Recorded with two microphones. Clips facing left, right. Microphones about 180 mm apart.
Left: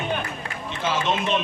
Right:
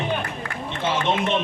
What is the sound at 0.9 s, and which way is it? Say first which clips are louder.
Speech: right 1 dB; 60° right (ahead or behind).